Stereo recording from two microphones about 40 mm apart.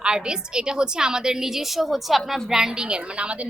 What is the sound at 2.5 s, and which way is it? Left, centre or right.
Speech, centre.